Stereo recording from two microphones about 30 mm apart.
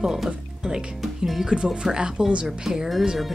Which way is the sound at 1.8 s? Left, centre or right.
Right.